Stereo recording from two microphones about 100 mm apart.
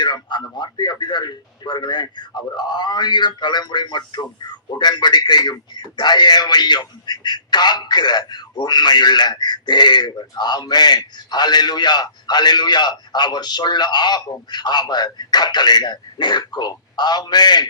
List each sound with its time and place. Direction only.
0.0 s speech: 50° left (ahead or behind)